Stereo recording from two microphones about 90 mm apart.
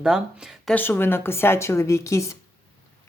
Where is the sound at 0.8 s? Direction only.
25° left (ahead or behind).